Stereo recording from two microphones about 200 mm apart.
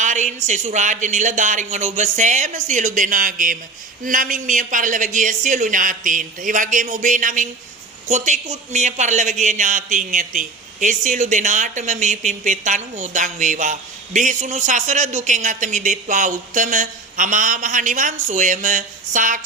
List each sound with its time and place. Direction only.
0.0 s a man's voice: 35° right (ahead or behind)